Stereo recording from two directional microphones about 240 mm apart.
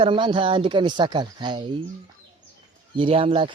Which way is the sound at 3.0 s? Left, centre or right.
Right.